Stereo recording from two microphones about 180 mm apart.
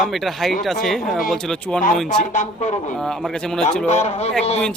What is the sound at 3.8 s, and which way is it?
Speech, 40° left (ahead or behind).